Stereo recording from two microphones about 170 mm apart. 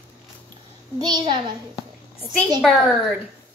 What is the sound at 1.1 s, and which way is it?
Speech, 25° right (ahead or behind).